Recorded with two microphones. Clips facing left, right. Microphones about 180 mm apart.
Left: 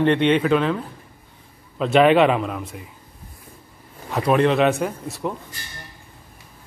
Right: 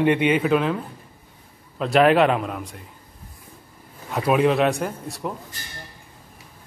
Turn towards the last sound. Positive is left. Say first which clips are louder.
# left 2 dB
turn(degrees=0)  # may be behind; listen again after turning